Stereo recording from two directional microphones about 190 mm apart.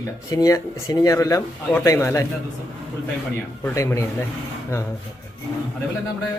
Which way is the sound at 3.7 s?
15° left (ahead or behind).